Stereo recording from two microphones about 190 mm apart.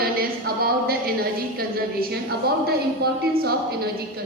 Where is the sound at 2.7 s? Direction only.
55° right (ahead or behind).